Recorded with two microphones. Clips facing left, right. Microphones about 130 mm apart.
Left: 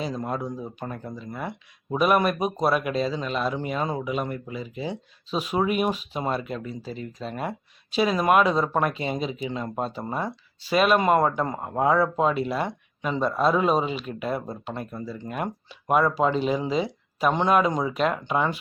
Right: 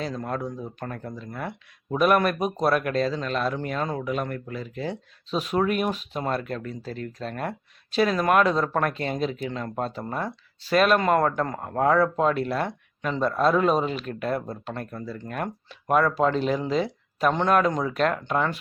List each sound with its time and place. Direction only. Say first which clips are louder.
0.0 s speech: left 1 dB; 10° left (ahead or behind)